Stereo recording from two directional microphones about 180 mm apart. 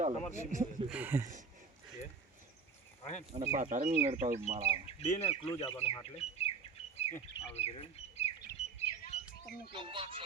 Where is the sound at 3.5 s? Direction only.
45° right (ahead or behind).